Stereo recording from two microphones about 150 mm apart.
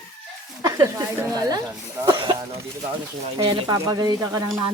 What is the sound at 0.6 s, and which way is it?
Speech, 25° right (ahead or behind).